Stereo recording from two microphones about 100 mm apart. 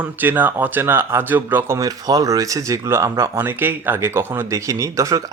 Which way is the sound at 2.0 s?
40° right (ahead or behind).